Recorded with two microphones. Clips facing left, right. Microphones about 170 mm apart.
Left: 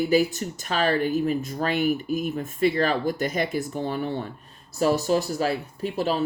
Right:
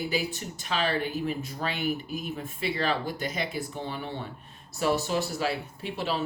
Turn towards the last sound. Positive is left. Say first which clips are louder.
# left 6 dB
turn(degrees=40)  # may be behind; listen again after turning